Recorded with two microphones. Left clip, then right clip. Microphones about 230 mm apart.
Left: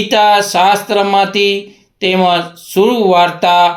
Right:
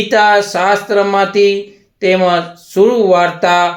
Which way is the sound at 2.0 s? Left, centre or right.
Left.